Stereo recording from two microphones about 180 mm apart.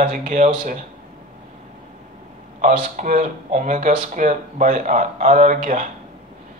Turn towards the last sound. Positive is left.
turn(degrees=-45)  # may be behind; listen again after turning